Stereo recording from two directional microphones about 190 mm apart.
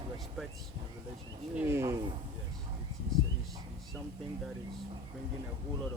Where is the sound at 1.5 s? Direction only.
15° right (ahead or behind).